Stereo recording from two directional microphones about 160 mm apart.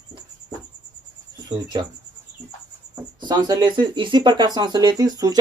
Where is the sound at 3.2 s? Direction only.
25° right (ahead or behind).